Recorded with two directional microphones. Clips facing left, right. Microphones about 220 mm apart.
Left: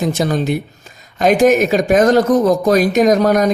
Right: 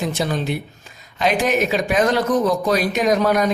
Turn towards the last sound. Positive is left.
turn(degrees=45)  # may be behind; listen again after turning